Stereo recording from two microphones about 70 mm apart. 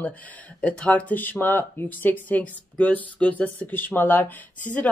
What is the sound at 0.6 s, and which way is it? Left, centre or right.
Speech, centre.